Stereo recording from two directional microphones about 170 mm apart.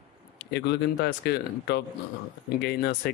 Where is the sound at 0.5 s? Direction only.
80° left.